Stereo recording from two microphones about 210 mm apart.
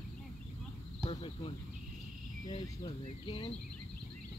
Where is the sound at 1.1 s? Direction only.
25° left (ahead or behind).